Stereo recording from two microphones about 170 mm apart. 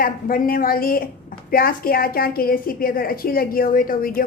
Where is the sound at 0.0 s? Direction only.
60° left (ahead or behind).